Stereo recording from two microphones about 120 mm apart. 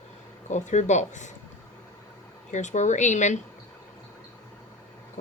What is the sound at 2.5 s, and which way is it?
Speech, 90° left.